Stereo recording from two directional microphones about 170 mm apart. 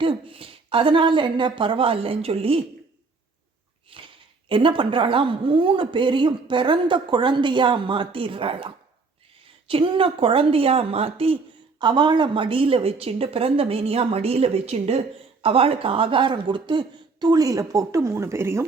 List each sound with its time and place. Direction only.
0.0 s a woman's voice: 30° right (ahead or behind)
3.9 s a woman's voice: 30° right (ahead or behind); by 18.6 s 15° right (ahead or behind)